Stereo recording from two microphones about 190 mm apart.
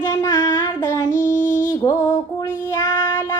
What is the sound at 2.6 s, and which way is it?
Child singing, 15° left (ahead or behind).